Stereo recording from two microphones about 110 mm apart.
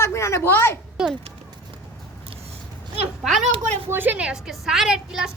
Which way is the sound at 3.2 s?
Centre (ahead or behind).